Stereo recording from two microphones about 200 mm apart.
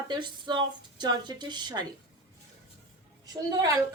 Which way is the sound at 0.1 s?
25° right (ahead or behind).